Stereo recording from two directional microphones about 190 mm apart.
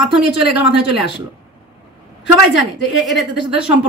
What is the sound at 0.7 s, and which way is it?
Speech, 60° left (ahead or behind).